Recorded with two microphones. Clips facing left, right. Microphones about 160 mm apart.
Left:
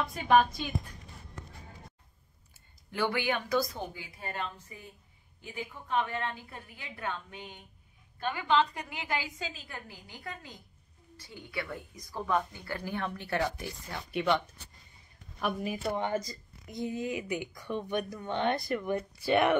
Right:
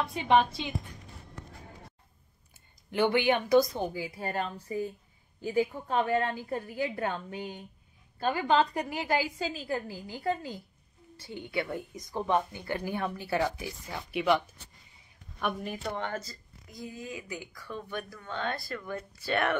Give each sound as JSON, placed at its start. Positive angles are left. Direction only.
{"t": 0.1, "sound": "a woman's voice", "side_deg": -25}
{"t": 2.9, "sound": "a woman's voice", "side_deg": -20}
{"t": 3.7, "sound": "a woman's voice", "side_deg": -35}